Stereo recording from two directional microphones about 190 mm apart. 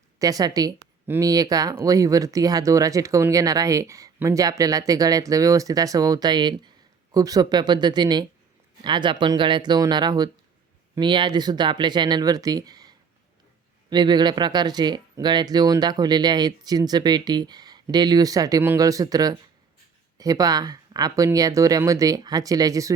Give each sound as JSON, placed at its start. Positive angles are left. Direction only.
{"t": 0.2, "sound": "speech", "side_deg": -20}
{"t": 13.9, "sound": "speech", "side_deg": -25}